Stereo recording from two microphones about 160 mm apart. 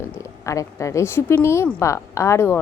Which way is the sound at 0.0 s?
20° left (ahead or behind).